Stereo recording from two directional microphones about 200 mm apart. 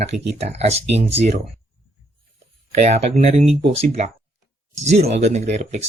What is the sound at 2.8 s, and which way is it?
Speech, 35° right (ahead or behind).